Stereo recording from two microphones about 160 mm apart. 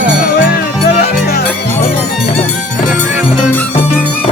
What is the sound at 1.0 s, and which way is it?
Music, 75° left (ahead or behind).